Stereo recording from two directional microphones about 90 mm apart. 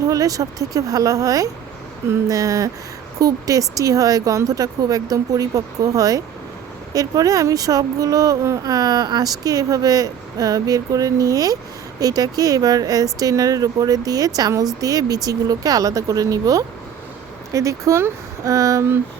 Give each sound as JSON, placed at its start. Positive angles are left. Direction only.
{"t": 0.1, "sound": "speech", "side_deg": -40}